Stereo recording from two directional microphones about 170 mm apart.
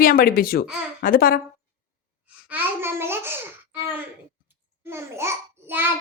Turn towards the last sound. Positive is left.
turn(degrees=-15)  # may be behind; listen again after turning